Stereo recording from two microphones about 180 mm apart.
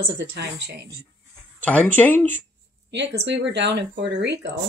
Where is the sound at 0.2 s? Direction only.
65° right (ahead or behind).